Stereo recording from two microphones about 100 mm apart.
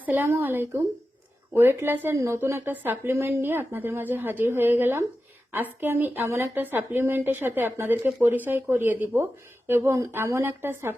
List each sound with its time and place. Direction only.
0.0 s speech: 20° right (ahead or behind)